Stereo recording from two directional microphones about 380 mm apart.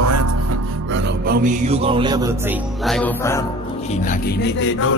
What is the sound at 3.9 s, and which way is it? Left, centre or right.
Speech, left.